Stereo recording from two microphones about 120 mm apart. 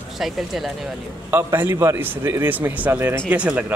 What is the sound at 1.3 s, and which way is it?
A man's voice, 20° right (ahead or behind).